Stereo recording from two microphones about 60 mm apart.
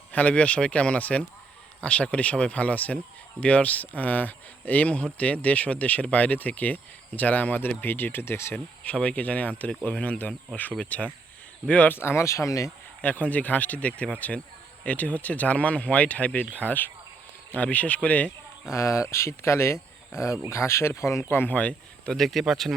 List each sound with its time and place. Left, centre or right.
0.1 s speech: left
8.8 s speech: left
11.9 s speech: left
13.0 s speech: left
18.7 s speech: left
21.5 s speech: left
22.1 s speech: centre